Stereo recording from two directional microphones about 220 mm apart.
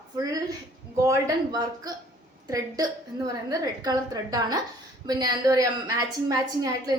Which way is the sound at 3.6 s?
15° right (ahead or behind).